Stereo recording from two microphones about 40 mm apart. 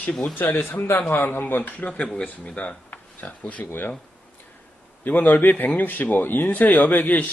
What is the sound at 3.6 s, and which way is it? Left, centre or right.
Speech, left.